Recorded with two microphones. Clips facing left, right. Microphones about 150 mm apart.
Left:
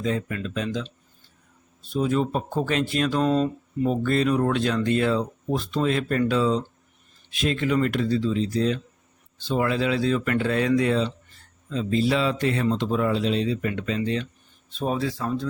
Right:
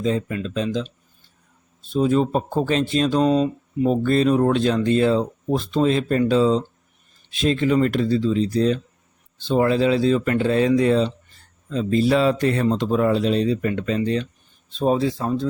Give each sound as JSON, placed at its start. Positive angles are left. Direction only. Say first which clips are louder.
{"t": 0.0, "sound": "speech", "louder": "right 4 dB", "side_deg": -25}
{"t": 1.9, "sound": "speech", "louder": "right 5 dB", "side_deg": -30}
{"t": 3.2, "sound": "speech", "louder": "right 3 dB", "side_deg": -5}
{"t": 3.8, "sound": "speech", "louder": "right 4 dB", "side_deg": -30}
{"t": 11.7, "sound": "speech", "louder": "right 4 dB", "side_deg": -45}
{"t": 14.8, "sound": "speech", "louder": "right 6 dB", "side_deg": -25}